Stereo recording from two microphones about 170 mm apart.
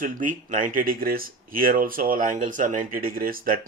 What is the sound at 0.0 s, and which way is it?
Speech, 50° right (ahead or behind).